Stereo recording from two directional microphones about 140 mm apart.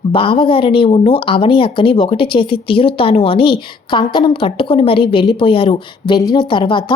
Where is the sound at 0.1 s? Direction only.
40° left (ahead or behind).